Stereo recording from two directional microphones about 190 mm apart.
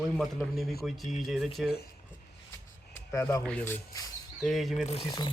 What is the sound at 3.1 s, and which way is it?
Speech, 15° left (ahead or behind).